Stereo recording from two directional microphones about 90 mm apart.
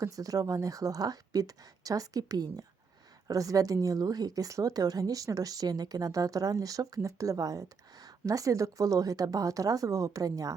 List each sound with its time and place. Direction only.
0.0 s speech: 40° right (ahead or behind)